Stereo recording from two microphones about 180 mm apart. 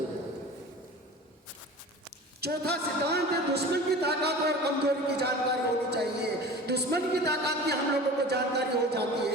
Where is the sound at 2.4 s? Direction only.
65° right (ahead or behind).